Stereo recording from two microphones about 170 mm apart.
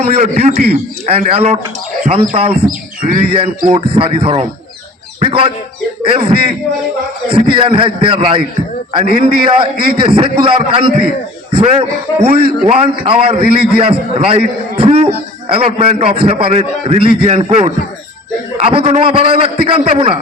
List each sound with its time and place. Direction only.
0.0 s a man's voice: 40° right (ahead or behind)
2.6 s speech: 55° right (ahead or behind)
3.2 s a man's voice: 35° right (ahead or behind)